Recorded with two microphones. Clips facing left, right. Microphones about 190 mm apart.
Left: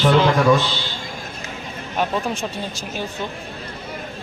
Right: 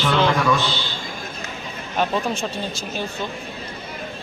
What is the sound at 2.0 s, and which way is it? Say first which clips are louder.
Speech: even; 15° left (ahead or behind).